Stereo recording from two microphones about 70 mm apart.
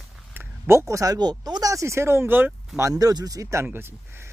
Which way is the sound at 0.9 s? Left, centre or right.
Right.